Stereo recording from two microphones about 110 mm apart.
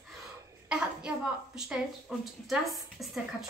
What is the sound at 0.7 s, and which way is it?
Speech, 5° right (ahead or behind).